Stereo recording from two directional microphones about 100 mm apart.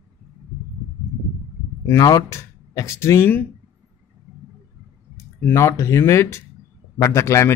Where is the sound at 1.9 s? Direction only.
35° left (ahead or behind).